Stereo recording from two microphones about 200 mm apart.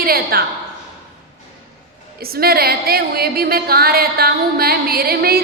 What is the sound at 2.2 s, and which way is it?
A woman's voice, 50° right (ahead or behind).